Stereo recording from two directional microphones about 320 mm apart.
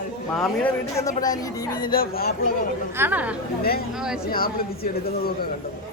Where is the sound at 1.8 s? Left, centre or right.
Left.